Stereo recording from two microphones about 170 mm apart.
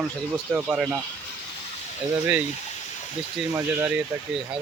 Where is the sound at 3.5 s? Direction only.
10° right (ahead or behind).